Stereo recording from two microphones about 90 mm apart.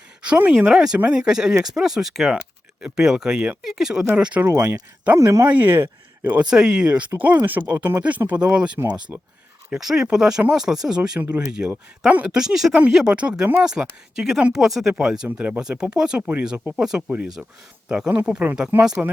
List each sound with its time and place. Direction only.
0.2 s speech: 15° right (ahead or behind)
4.4 s speech: 30° right (ahead or behind)
5.5 s speech: 20° right (ahead or behind)
6.4 s speech: 5° right (ahead or behind)